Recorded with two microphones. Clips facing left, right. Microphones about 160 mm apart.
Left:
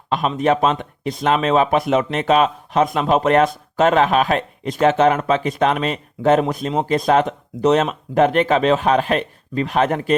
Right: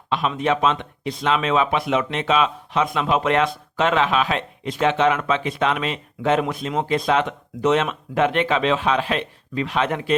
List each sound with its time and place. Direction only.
0.1 s speech: 45° left (ahead or behind)